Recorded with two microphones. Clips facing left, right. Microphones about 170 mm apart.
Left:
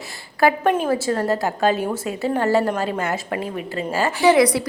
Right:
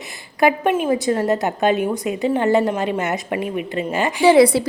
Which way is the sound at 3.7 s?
35° left (ahead or behind).